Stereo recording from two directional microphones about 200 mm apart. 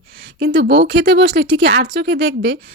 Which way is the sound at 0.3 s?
60° right (ahead or behind).